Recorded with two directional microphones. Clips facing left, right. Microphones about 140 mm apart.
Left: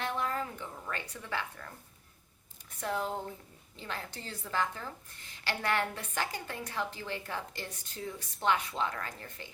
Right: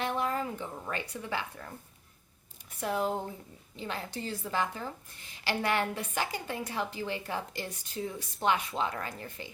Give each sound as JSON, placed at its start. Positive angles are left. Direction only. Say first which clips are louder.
{"t": 0.0, "sound": "a woman's voice", "louder": "right 3 dB", "side_deg": -15}
{"t": 2.6, "sound": "a woman's voice", "louder": "right 3 dB", "side_deg": -15}